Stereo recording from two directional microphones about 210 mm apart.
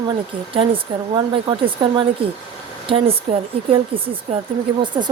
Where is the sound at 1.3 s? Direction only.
25° right (ahead or behind).